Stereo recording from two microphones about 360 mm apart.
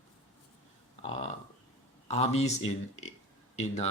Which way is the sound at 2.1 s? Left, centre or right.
Centre.